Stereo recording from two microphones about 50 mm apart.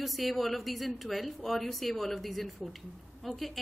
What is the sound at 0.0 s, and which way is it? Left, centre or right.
A woman's voice, centre.